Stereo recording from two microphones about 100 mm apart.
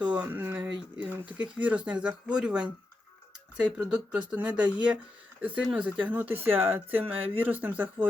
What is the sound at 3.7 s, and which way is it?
Speech, 10° right (ahead or behind).